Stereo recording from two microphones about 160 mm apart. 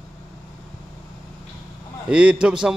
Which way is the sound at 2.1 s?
5° right (ahead or behind).